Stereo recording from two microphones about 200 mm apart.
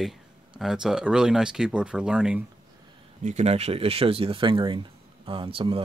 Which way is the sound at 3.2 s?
35° right (ahead or behind).